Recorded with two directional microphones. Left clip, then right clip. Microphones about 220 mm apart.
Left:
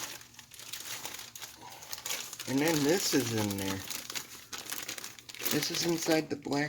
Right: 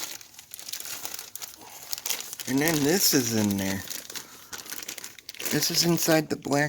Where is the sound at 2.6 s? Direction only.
50° right (ahead or behind).